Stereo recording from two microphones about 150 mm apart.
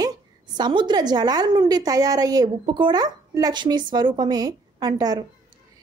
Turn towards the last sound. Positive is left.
turn(degrees=-25)  # may be behind; listen again after turning